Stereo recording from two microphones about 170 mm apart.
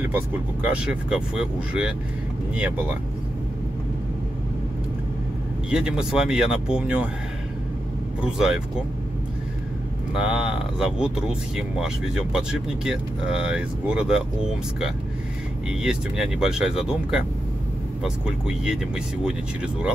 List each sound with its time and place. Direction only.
0.7 s speech: 5° right (ahead or behind)
5.7 s speech: 5° right (ahead or behind)
8.2 s speech: 5° right (ahead or behind)
10.1 s speech: 5° right (ahead or behind)